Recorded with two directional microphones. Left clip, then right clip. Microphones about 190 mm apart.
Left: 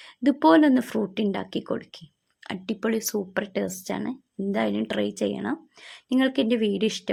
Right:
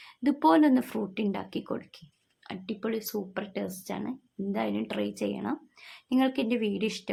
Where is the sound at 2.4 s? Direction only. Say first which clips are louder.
Left 6 dB; 40° left (ahead or behind).